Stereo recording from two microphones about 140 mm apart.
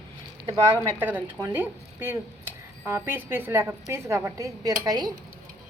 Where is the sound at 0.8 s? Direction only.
15° right (ahead or behind).